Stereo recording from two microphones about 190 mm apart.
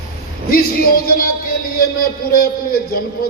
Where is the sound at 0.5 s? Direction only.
50° left (ahead or behind).